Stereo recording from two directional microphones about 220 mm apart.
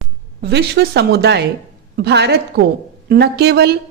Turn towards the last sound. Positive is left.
turn(degrees=-45)  # may be behind; listen again after turning